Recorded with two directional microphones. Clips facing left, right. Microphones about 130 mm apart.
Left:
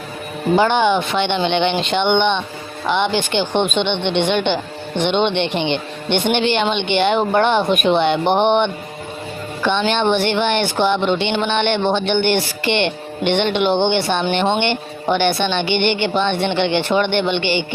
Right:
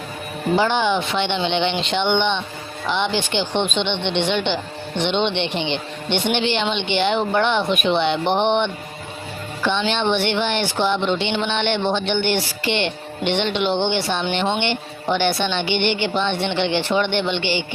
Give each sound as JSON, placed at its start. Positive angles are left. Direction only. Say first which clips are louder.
{"t": 0.5, "sound": "speech", "louder": "left 4 dB", "side_deg": 55}
{"t": 10.4, "sound": "speech", "louder": "left 4 dB", "side_deg": 60}